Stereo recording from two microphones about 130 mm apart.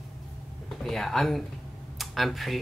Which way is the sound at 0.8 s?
Centre (ahead or behind).